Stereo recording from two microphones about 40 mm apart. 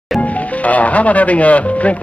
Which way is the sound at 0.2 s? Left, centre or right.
Left.